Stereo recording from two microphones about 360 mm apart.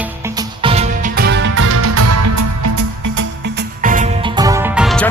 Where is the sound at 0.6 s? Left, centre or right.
Centre; by 3.2 s right.